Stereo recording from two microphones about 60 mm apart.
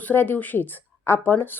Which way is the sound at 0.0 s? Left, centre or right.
Left.